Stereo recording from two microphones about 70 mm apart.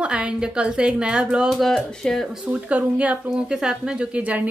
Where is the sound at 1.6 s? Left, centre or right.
Centre.